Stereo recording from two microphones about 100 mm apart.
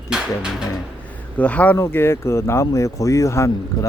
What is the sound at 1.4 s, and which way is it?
Speech, 15° left (ahead or behind).